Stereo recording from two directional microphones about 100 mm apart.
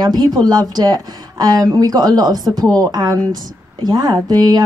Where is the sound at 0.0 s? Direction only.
40° right (ahead or behind).